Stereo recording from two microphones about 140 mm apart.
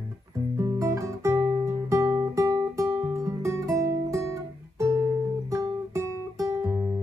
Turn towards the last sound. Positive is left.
turn(degrees=-25)  # may be behind; listen again after turning